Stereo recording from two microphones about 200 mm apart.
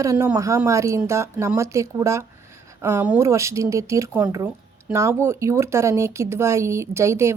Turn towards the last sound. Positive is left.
turn(degrees=-15)  # may be behind; listen again after turning